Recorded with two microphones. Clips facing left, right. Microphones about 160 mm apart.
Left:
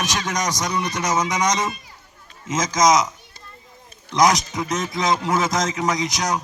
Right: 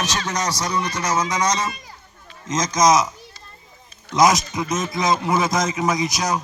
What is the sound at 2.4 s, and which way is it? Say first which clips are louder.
Speech: even; 5° left (ahead or behind).